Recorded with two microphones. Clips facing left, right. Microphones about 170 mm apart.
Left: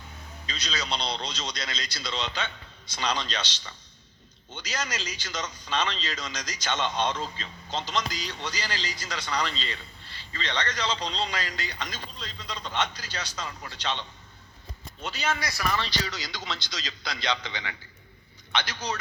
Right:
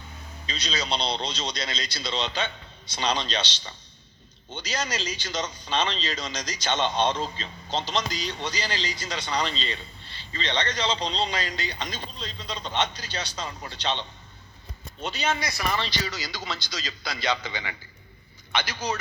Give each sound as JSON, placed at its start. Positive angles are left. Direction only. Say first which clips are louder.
{"t": 0.4, "sound": "a man's voice", "louder": "right 3 dB", "side_deg": -25}
{"t": 16.0, "sound": "a man's voice", "louder": "right 2 dB", "side_deg": -5}